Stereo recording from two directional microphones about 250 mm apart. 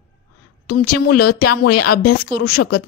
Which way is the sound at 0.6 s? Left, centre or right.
Left.